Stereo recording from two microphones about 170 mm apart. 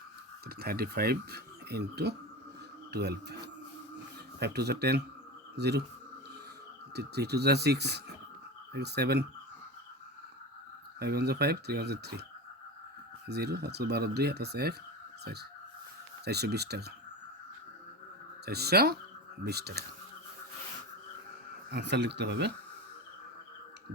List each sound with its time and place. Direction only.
0.4 s speech: 65° right (ahead or behind)
6.9 s speech: 75° right (ahead or behind)
11.0 s speech: 70° right (ahead or behind)
13.2 s speech: 70° right (ahead or behind)
18.4 s speech: 70° right (ahead or behind)
21.7 s speech: 85° right